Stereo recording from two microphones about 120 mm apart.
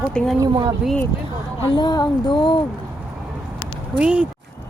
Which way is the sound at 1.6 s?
40° left (ahead or behind).